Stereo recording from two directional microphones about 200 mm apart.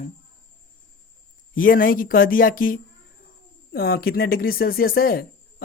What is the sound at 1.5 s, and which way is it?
Speech, 45° left (ahead or behind).